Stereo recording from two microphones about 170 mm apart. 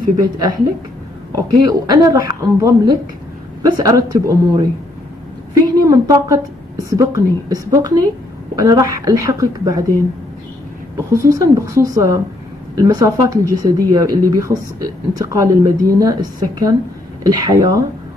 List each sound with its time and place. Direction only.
1.3 s a woman's voice: 25° right (ahead or behind)
11.0 s a woman's voice: 15° right (ahead or behind)